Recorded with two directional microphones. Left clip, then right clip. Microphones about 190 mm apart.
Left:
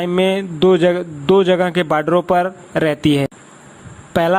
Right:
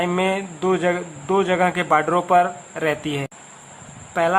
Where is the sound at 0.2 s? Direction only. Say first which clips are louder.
Left 6 dB; 35° left (ahead or behind).